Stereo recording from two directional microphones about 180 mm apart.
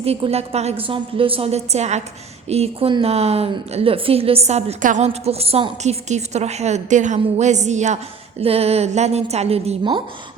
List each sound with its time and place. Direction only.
0.0 s a woman's voice: 35° right (ahead or behind)